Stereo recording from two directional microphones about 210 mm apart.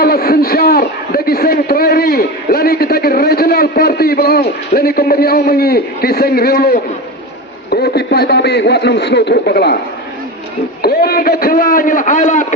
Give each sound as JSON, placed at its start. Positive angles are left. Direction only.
{"t": 0.0, "sound": "a man's voice", "side_deg": 45}
{"t": 10.8, "sound": "a man's voice", "side_deg": 45}